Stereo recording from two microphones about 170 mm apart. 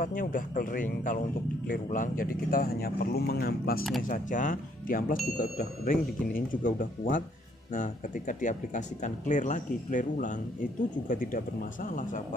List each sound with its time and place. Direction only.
0.0 s speech: 55° left (ahead or behind)
4.0 s speech: 50° left (ahead or behind)